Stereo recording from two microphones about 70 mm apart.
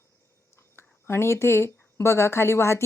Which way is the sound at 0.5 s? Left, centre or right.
Left.